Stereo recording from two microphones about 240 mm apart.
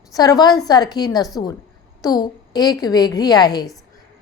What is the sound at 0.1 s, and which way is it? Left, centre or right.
A woman's voice, centre.